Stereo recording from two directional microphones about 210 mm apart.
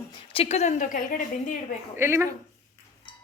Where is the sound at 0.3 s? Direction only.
30° left (ahead or behind).